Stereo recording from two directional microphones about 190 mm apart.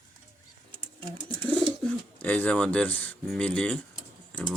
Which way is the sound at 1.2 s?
10° left (ahead or behind).